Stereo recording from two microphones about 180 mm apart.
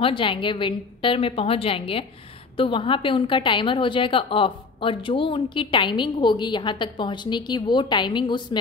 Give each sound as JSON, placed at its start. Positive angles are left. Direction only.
{"t": 0.0, "sound": "a woman's voice", "side_deg": 30}